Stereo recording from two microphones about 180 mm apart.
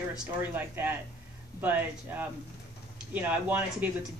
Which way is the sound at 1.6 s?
10° right (ahead or behind).